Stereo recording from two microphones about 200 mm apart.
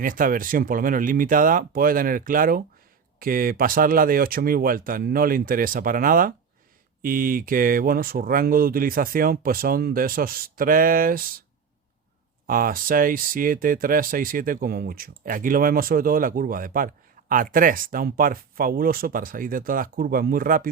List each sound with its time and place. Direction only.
0.0 s speech: 45° right (ahead or behind)
12.5 s speech: 45° right (ahead or behind)